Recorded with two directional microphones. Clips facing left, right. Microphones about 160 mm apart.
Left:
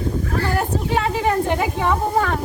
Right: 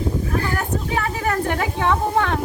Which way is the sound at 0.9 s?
25° left (ahead or behind).